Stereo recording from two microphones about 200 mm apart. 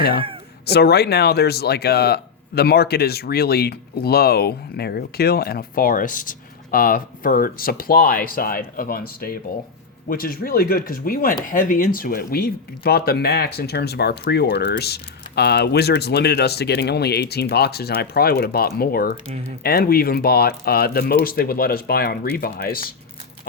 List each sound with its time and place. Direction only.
0.6 s speech: 55° left (ahead or behind)